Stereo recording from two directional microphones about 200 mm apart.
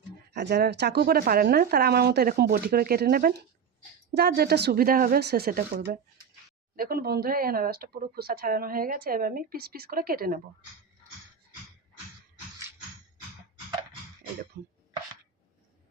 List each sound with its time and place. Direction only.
0.3 s speech: 55° right (ahead or behind)
14.5 s speech: 55° right (ahead or behind)